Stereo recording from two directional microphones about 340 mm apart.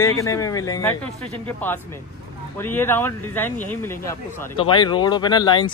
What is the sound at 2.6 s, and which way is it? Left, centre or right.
Speech, centre.